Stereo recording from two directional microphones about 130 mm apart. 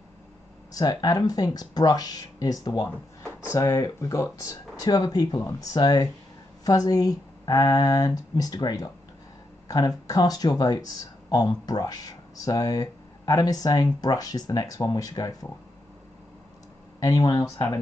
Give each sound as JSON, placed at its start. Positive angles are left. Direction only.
{"t": 0.7, "sound": "speech", "side_deg": 30}
{"t": 17.0, "sound": "speech", "side_deg": 30}